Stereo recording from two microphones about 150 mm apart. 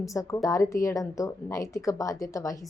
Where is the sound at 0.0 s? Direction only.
20° left (ahead or behind).